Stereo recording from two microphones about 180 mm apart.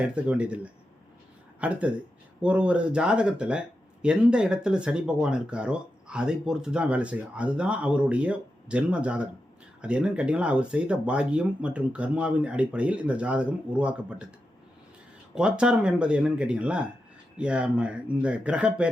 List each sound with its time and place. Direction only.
0.2 s speech: 5° right (ahead or behind)
15.4 s speech: 5° right (ahead or behind)